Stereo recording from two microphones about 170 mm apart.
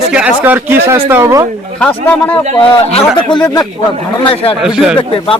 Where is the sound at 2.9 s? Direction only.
30° left (ahead or behind).